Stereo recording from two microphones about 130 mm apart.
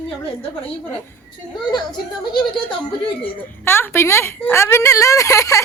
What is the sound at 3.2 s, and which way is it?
A woman's voice, 15° left (ahead or behind).